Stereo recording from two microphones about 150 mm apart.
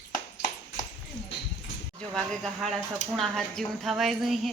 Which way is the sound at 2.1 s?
Centre (ahead or behind).